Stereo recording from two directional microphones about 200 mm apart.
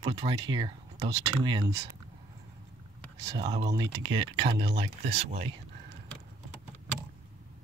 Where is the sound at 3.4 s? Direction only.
20° right (ahead or behind).